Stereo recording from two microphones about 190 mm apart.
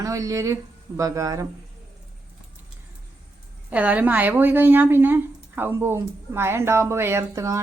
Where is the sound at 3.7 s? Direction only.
10° right (ahead or behind).